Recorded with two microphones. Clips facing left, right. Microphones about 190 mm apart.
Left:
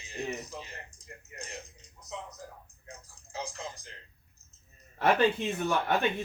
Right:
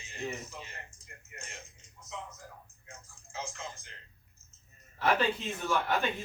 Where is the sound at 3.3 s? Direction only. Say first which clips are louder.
Left 2 dB; 35° left (ahead or behind).